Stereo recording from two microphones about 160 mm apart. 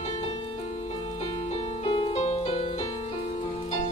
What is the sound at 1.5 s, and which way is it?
Music, 40° left (ahead or behind).